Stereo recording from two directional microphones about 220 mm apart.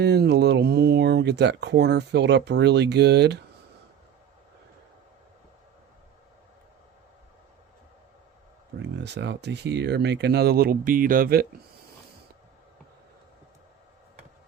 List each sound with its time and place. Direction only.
0.0 s speech: 50° right (ahead or behind)
8.8 s speech: 50° right (ahead or behind)